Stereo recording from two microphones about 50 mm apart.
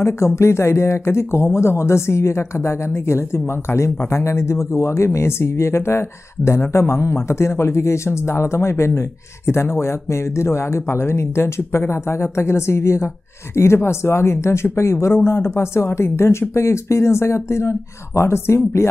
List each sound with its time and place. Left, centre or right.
0.4 s speech: left
15.2 s speech: left